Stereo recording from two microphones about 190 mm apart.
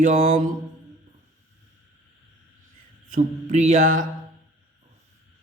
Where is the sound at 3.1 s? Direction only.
35° right (ahead or behind).